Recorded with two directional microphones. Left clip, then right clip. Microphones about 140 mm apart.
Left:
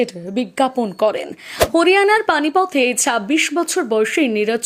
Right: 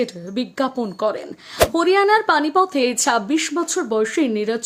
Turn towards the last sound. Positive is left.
turn(degrees=15)  # may be behind; listen again after turning